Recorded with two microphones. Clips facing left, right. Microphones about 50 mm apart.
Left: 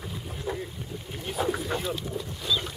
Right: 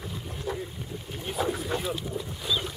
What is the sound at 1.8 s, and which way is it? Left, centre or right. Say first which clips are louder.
Speech: even; centre.